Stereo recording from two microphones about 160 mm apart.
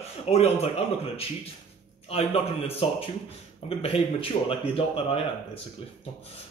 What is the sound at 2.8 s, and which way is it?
Speech, 35° left (ahead or behind).